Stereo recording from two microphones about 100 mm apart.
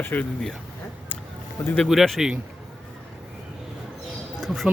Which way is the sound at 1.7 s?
5° left (ahead or behind).